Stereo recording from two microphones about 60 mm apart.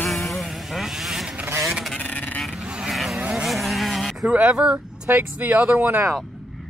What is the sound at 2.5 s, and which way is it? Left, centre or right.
Vehicle, centre.